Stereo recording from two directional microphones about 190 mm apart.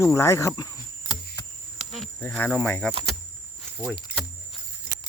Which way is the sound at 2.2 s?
10° left (ahead or behind).